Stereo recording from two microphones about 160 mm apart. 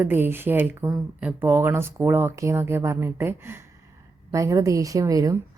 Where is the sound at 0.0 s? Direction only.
15° right (ahead or behind).